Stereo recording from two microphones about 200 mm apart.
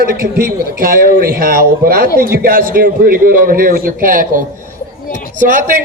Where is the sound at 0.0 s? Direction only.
45° right (ahead or behind).